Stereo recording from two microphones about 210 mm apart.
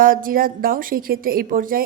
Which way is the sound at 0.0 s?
40° right (ahead or behind).